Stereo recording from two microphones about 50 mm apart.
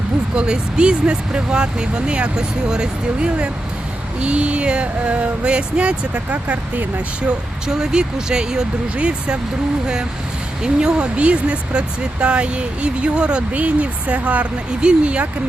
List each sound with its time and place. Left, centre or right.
0.3 s speech: centre
7.2 s speech: centre